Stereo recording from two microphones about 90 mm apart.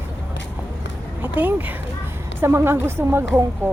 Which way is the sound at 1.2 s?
20° right (ahead or behind).